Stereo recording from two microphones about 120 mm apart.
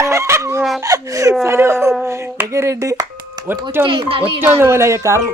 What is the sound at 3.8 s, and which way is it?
Speech, 45° right (ahead or behind).